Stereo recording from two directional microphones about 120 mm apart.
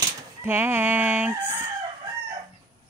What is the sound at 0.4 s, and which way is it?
Fowl, 20° right (ahead or behind).